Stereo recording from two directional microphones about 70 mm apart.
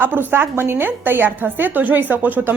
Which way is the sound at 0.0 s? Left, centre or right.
Right.